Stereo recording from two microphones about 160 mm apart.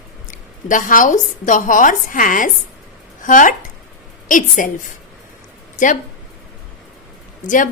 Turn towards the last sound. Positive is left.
turn(degrees=55)  # may be behind; listen again after turning